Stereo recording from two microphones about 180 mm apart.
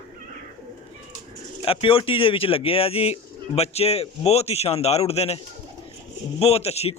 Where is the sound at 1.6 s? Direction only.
30° left (ahead or behind).